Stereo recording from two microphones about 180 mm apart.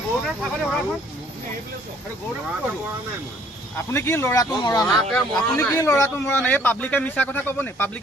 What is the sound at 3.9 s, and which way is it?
Speech, 15° left (ahead or behind).